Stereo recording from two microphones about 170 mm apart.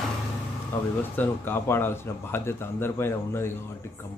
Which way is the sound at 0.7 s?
15° left (ahead or behind).